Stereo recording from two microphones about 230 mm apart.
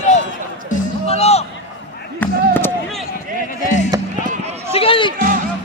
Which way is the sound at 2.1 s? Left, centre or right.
Centre.